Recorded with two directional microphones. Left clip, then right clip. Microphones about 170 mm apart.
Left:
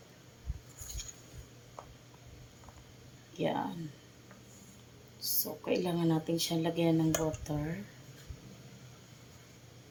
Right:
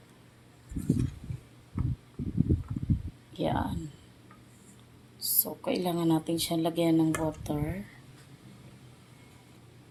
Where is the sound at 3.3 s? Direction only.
60° right (ahead or behind).